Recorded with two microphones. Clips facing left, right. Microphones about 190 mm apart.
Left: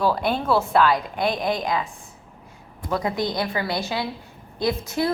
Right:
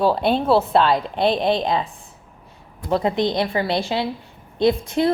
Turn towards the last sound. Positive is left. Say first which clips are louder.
# right 5 dB
turn(degrees=-25)  # may be behind; listen again after turning